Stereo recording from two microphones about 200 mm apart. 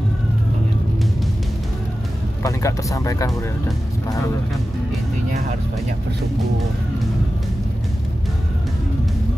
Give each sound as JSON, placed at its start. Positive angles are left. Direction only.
{"t": 2.4, "sound": "speech", "side_deg": 15}